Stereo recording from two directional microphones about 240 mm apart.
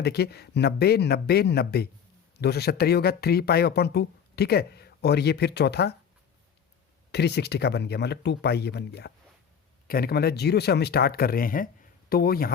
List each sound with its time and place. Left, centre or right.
0.0 s speech: left
7.1 s speech: left